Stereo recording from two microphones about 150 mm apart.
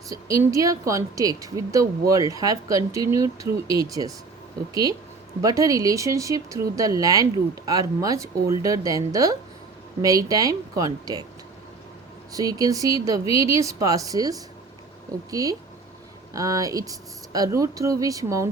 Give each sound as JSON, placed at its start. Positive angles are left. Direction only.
{"t": 0.1, "sound": "a woman's voice", "side_deg": -20}
{"t": 12.3, "sound": "a woman's voice", "side_deg": -25}